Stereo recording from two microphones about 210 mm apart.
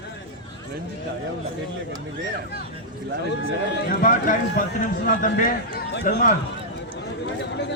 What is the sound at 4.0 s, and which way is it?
Speech, 40° left (ahead or behind).